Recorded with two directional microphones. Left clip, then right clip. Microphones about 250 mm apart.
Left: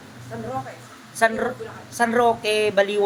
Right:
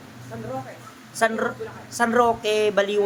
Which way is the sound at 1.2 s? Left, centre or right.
Centre.